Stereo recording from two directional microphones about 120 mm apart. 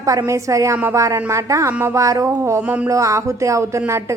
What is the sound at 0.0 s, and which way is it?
A woman's voice, 30° right (ahead or behind).